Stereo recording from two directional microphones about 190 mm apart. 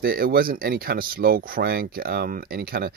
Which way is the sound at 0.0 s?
50° right (ahead or behind).